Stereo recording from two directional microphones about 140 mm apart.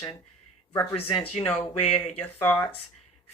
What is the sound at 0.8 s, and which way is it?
Speech, 15° left (ahead or behind).